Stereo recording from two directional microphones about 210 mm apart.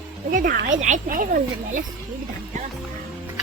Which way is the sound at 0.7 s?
35° right (ahead or behind).